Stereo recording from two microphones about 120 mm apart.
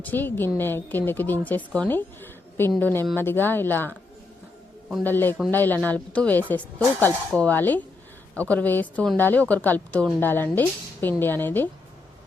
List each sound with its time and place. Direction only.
0.0 s a woman's voice: 15° left (ahead or behind)
5.0 s a woman's voice: 15° left (ahead or behind)